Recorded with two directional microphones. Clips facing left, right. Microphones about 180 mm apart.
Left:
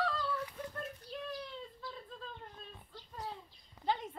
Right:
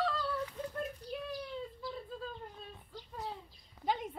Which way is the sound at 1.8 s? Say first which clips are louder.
Right 5 dB; 5° right (ahead or behind).